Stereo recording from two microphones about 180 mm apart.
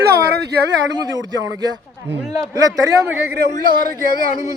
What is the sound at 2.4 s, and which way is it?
Speech, 20° right (ahead or behind).